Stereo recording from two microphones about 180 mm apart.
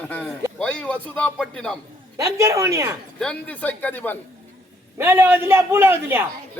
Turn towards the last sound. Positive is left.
turn(degrees=-10)  # may be behind; listen again after turning